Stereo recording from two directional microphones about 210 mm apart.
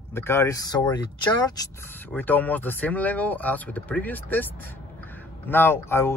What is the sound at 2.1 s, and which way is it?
Speech, 10° left (ahead or behind).